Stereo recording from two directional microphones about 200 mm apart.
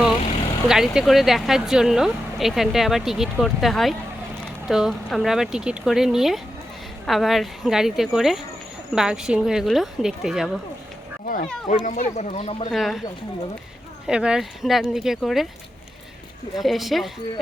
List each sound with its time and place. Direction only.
0.7 s speech: centre (ahead or behind)
11.7 s speech: 35° left (ahead or behind)
12.7 s speech: centre (ahead or behind)
14.1 s speech: 5° right (ahead or behind)
16.6 s speech: centre (ahead or behind)